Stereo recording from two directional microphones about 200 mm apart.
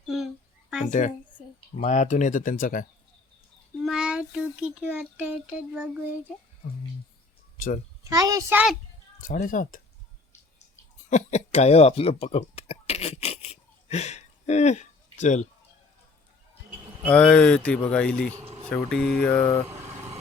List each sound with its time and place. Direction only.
0.0 s a sound: centre (ahead or behind)
0.9 s speech: 40° left (ahead or behind)
3.8 s a child's voice: 5° right (ahead or behind)
8.0 s a child's voice: 15° right (ahead or behind)
9.2 s speech: 40° left (ahead or behind)
11.1 s cough: 35° left (ahead or behind)
17.1 s speech: 5° left (ahead or behind)